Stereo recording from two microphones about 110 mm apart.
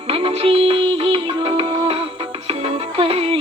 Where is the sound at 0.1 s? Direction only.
55° right (ahead or behind).